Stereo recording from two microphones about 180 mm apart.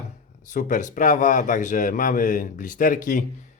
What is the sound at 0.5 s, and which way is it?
A man's voice, 45° left (ahead or behind).